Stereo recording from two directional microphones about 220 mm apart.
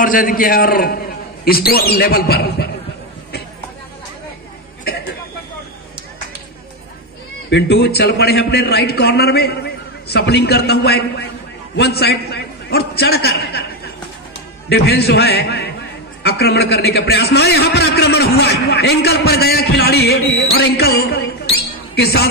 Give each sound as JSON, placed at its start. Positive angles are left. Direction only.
{"t": 0.0, "sound": "a man's voice", "side_deg": 40}
{"t": 7.4, "sound": "a man's voice", "side_deg": 50}
{"t": 14.7, "sound": "a man's voice", "side_deg": 45}